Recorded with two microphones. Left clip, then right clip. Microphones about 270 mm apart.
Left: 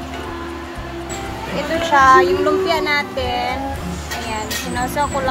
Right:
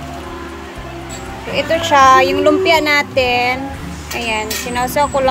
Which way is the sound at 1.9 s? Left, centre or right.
Right.